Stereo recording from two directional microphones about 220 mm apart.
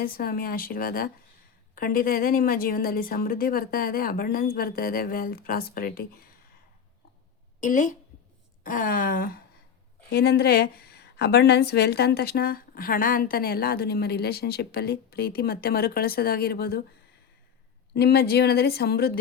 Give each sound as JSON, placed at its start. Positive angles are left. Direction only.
{"t": 0.0, "sound": "speech", "side_deg": 40}
{"t": 7.6, "sound": "a woman's voice", "side_deg": 35}
{"t": 17.9, "sound": "a woman's voice", "side_deg": 45}